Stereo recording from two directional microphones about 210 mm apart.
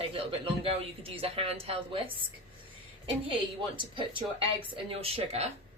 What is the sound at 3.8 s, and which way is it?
Speech, 25° right (ahead or behind).